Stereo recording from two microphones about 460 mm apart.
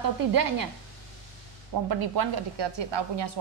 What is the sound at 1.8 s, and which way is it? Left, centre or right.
A woman's voice, right.